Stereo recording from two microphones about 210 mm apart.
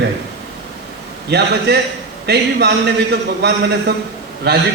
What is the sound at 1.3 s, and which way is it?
A man's voice, 55° right (ahead or behind).